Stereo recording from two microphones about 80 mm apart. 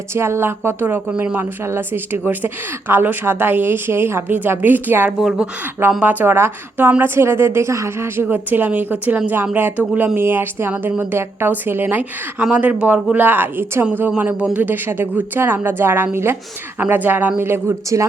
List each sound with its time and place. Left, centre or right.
0.1 s a woman's voice: right